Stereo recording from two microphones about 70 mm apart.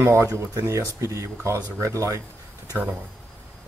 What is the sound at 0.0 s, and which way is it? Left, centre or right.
Speech, right.